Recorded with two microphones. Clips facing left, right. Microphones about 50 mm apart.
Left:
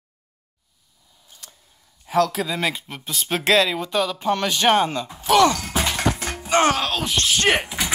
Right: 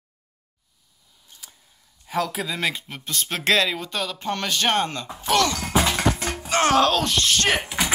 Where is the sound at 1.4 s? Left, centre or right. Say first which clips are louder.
Left 1 dB; centre.